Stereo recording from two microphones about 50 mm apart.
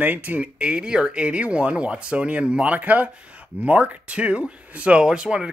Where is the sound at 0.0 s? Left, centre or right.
Right.